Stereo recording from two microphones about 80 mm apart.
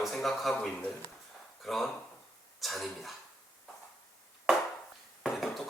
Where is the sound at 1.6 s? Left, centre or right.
Centre.